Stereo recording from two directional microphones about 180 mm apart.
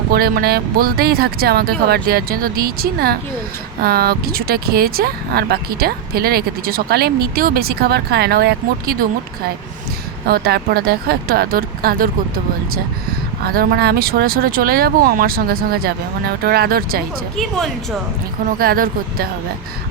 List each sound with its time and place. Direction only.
0.1 s speech: 60° right (ahead or behind)
10.2 s speech: 60° right (ahead or behind)
13.4 s speech: 55° right (ahead or behind)
18.6 s speech: 55° right (ahead or behind)